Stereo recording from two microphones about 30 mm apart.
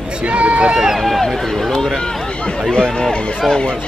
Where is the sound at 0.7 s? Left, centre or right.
Right.